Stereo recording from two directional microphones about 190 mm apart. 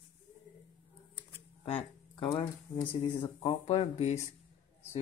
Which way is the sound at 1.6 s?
25° left (ahead or behind).